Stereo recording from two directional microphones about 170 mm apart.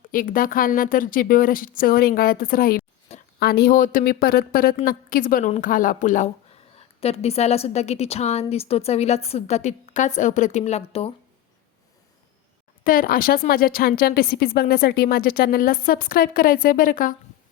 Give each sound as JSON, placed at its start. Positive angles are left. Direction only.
{"t": 0.1, "sound": "speech", "side_deg": 55}
{"t": 3.1, "sound": "a sound", "side_deg": 40}
{"t": 3.4, "sound": "a woman's voice", "side_deg": 65}
{"t": 12.8, "sound": "speech", "side_deg": 55}